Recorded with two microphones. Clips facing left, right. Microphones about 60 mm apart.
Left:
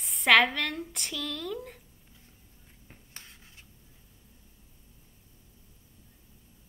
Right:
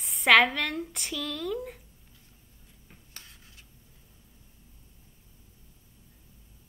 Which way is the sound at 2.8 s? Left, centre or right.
Left.